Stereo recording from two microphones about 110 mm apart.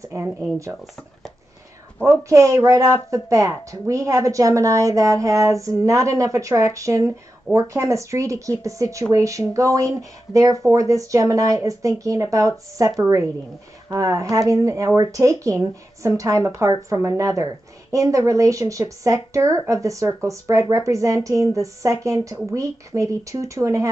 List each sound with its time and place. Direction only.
0.1 s a woman's voice: 20° right (ahead or behind)
2.0 s a woman's voice: 30° right (ahead or behind)